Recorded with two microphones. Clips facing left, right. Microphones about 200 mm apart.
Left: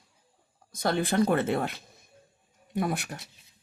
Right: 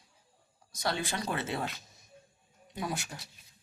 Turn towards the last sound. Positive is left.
turn(degrees=60)  # may be behind; listen again after turning